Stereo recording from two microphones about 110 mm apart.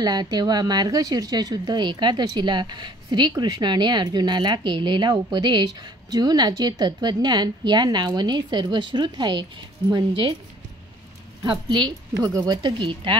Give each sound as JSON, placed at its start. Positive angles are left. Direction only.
{"t": 0.0, "sound": "speech", "side_deg": -40}
{"t": 11.7, "sound": "speech", "side_deg": -40}